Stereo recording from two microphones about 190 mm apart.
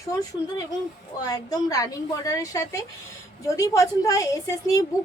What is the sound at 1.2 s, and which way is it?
A woman's voice, 20° left (ahead or behind).